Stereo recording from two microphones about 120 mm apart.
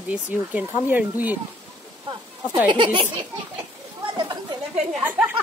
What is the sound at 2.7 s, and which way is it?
Speech, 40° right (ahead or behind).